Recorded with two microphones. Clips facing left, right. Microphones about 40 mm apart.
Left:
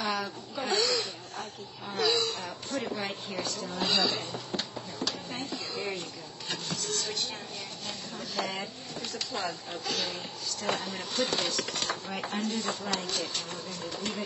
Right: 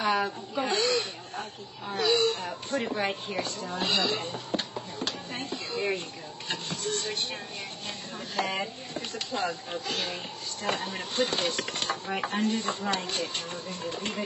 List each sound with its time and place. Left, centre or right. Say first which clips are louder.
0.0 s a woman's voice: right 5 dB; centre
0.7 s snake: left 1 dB; right
2.0 s chopping: right 3 dB; right
2.8 s speech: right 5 dB; right
6.5 s chopping: right 3 dB; right
8.4 s chopping: right 4 dB; right